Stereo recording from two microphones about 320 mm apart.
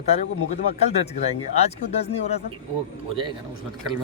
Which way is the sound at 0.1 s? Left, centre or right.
Centre.